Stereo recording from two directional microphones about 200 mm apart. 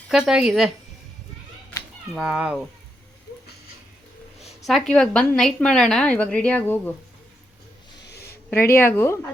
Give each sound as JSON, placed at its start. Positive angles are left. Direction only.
{"t": 0.1, "sound": "a woman's voice", "side_deg": -5}
{"t": 2.1, "sound": "a woman's voice", "side_deg": -5}
{"t": 4.6, "sound": "a woman's voice", "side_deg": 0}
{"t": 8.0, "sound": "a sound", "side_deg": 55}
{"t": 8.7, "sound": "speech", "side_deg": 10}